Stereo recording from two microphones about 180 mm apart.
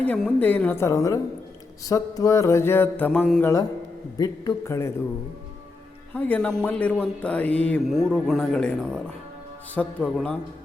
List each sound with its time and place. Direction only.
0.0 s speech: 5° left (ahead or behind)
4.2 s speech: 20° left (ahead or behind)
6.1 s speech: 10° left (ahead or behind)